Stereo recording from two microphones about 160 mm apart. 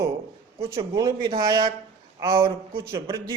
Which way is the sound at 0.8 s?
20° right (ahead or behind).